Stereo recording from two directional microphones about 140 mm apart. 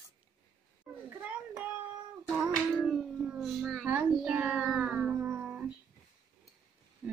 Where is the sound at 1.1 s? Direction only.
10° right (ahead or behind).